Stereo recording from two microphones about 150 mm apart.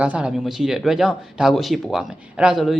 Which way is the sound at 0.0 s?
5° right (ahead or behind).